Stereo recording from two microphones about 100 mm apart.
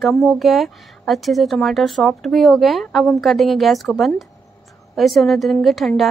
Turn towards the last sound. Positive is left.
turn(degrees=0)  # may be behind; listen again after turning